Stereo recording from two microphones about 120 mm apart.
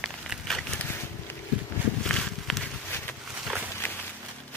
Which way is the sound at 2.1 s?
5° left (ahead or behind).